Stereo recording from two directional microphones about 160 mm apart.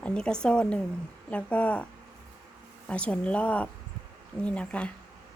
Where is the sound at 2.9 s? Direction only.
10° left (ahead or behind).